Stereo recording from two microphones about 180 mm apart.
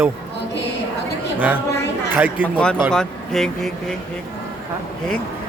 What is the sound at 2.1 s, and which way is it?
Speech, 10° right (ahead or behind).